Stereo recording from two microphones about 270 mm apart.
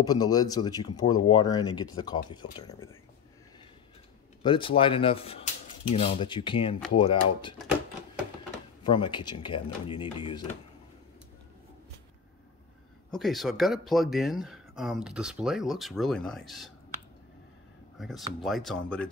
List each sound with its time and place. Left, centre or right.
0.0 s speech: centre
4.4 s speech: centre
8.8 s speech: centre
13.1 s speech: centre
17.9 s speech: centre